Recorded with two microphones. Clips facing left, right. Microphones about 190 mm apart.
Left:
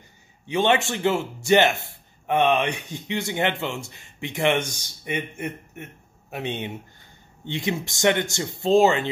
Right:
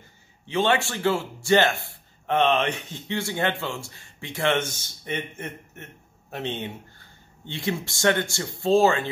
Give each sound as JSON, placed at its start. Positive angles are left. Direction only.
{"t": 0.5, "sound": "a man's voice", "side_deg": 20}